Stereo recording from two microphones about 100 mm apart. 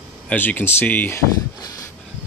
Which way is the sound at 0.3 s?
15° left (ahead or behind).